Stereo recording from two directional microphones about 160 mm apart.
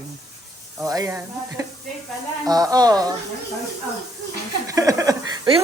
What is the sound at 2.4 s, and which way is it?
Speech, 25° right (ahead or behind).